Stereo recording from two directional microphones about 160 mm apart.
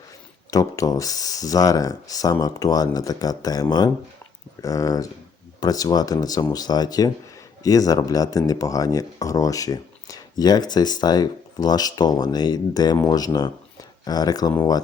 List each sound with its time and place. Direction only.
0.5 s speech: 20° left (ahead or behind)